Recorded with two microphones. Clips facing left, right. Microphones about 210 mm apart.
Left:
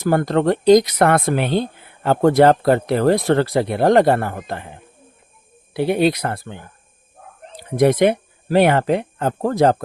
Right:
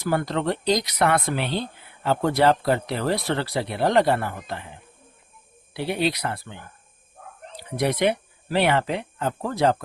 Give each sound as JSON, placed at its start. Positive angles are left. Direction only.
{"t": 0.0, "sound": "speech", "side_deg": 50}